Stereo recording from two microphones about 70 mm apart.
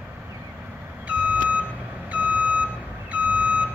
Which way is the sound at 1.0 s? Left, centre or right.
Centre.